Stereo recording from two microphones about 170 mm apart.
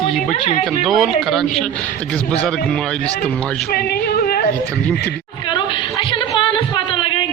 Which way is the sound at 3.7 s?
60° left (ahead or behind).